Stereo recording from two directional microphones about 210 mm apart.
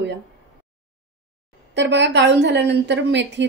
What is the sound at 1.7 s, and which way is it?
A woman's voice, 55° right (ahead or behind).